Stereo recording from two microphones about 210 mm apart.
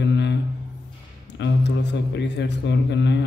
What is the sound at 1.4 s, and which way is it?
Speech, 60° left (ahead or behind).